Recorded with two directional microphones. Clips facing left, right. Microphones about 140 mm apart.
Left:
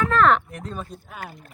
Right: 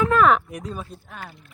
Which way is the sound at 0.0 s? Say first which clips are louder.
Right 1 dB; 10° right (ahead or behind).